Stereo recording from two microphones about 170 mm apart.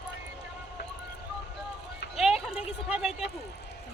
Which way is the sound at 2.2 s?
Centre (ahead or behind).